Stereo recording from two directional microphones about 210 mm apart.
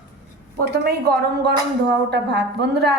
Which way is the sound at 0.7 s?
50° right (ahead or behind).